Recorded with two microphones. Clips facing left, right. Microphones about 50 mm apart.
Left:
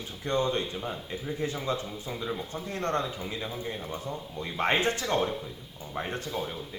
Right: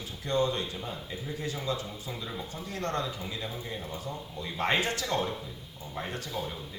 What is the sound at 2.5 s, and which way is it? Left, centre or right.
A man's voice, left.